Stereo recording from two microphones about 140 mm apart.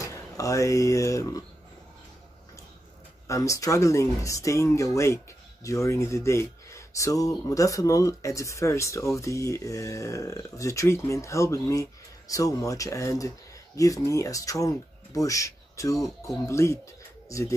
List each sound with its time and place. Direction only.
0.0 s speech: 25° left (ahead or behind)
3.3 s speech: 25° left (ahead or behind)